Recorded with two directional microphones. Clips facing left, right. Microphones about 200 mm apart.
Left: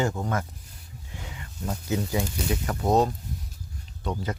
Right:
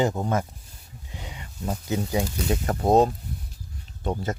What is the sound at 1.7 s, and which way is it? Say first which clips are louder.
Speech: right 1 dB; 20° right (ahead or behind).